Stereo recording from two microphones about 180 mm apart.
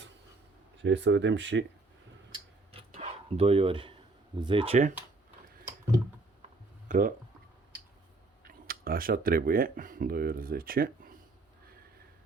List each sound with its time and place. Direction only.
0.8 s speech: 85° right
2.9 s a sound: 35° right (ahead or behind)
4.4 s speech: 25° right (ahead or behind)
6.8 s speech: 45° right (ahead or behind)
8.4 s speech: 55° right (ahead or behind)